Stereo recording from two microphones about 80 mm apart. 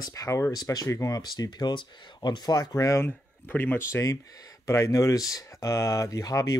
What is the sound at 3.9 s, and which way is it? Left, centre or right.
Speech, left.